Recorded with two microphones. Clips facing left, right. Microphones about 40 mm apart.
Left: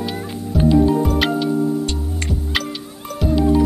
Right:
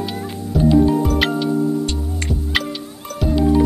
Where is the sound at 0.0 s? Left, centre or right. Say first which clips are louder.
Even; centre.